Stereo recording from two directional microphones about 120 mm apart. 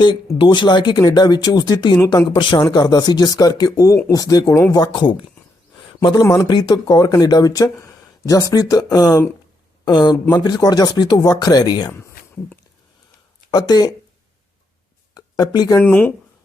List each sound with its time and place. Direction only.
0.3 s speech: 40° left (ahead or behind)
6.2 s speech: 30° left (ahead or behind)
11.9 s a sound: 20° left (ahead or behind)
13.5 s speech: 35° left (ahead or behind)
15.1 s a sound: 35° left (ahead or behind)
15.8 s speech: 15° left (ahead or behind)